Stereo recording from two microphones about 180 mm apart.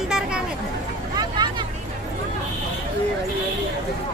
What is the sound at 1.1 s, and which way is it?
Vehicle, 20° right (ahead or behind).